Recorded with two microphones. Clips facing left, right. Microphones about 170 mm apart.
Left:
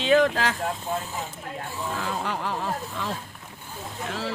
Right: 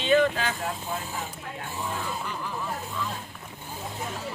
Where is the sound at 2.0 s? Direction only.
70° left (ahead or behind).